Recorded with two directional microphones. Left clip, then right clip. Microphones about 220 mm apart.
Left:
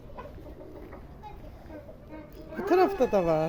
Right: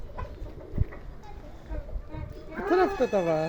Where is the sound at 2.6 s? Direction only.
5° left (ahead or behind).